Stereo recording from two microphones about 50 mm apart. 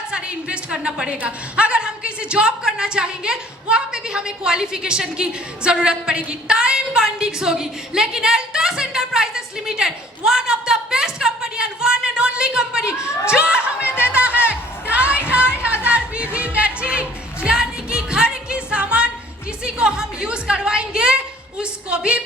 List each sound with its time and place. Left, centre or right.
0.1 s a woman's voice: right
14.0 s music: right
21.6 s a sound: centre